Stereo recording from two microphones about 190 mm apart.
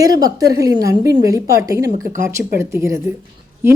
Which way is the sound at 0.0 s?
20° right (ahead or behind).